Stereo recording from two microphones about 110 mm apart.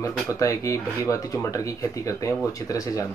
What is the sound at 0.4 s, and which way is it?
Speech, 30° left (ahead or behind).